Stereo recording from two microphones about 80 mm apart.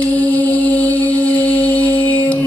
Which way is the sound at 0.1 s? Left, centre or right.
Left.